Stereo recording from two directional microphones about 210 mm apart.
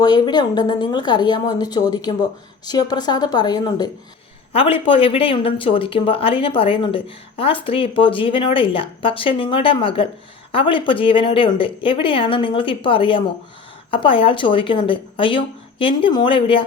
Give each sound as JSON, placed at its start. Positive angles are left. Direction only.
{"t": 0.0, "sound": "speech", "side_deg": 20}